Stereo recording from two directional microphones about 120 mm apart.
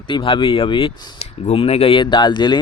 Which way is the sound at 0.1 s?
45° left (ahead or behind).